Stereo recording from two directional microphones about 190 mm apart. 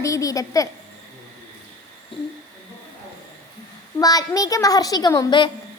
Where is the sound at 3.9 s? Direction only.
15° left (ahead or behind).